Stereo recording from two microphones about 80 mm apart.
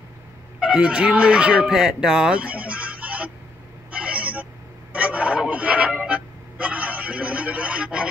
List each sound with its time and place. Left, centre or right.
0.6 s speech: centre
3.9 s a sound: centre
4.9 s music: centre